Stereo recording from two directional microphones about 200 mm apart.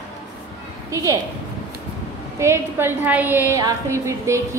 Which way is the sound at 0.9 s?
15° right (ahead or behind).